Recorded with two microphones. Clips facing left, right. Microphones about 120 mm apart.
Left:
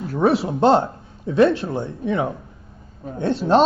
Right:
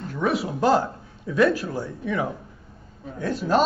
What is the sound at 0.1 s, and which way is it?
Speech, 30° left (ahead or behind).